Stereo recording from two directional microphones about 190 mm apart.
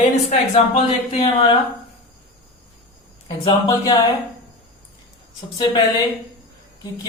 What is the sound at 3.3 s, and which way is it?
Speech, 20° left (ahead or behind).